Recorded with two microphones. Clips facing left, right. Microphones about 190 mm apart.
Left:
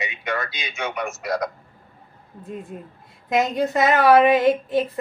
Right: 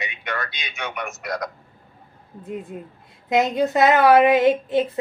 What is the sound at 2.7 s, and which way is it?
Speech, 20° right (ahead or behind).